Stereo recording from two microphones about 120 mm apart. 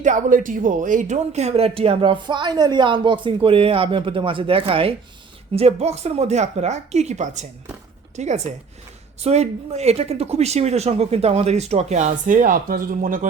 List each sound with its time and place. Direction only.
0.0 s speech: 90° right; by 4.9 s 50° right (ahead or behind)
5.5 s a woman's voice: 60° right (ahead or behind); by 12.4 s 85° right